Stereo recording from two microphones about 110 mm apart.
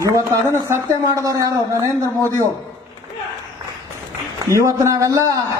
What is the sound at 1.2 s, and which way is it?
Speech, 30° right (ahead or behind).